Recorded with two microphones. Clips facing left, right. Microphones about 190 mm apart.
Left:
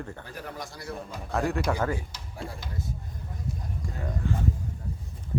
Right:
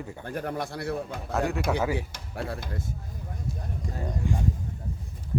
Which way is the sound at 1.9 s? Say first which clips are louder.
Right 6 dB; 70° right (ahead or behind).